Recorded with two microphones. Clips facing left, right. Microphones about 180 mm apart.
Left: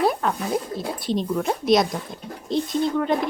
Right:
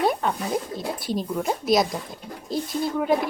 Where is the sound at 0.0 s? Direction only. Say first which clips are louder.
Left 1 dB; centre (ahead or behind).